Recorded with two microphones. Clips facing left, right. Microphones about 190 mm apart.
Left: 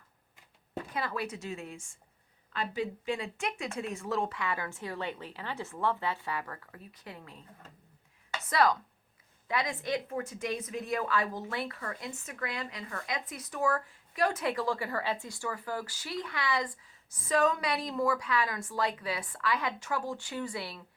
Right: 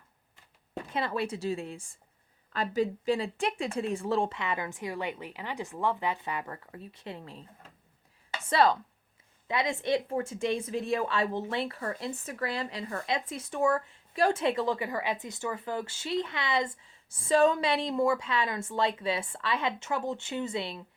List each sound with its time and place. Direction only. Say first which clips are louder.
0.9 s speech: right 5 dB; 25° right (ahead or behind)
8.4 s speech: right 3 dB; 30° right (ahead or behind)